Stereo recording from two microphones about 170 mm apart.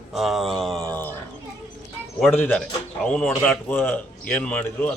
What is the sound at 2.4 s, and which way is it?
A man's voice, 10° left (ahead or behind).